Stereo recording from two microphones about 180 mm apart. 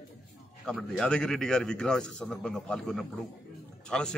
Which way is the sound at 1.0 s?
5° left (ahead or behind).